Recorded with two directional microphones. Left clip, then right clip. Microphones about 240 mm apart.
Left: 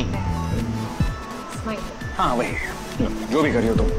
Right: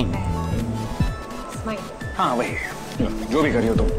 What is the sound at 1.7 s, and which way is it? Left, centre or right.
Speech, centre.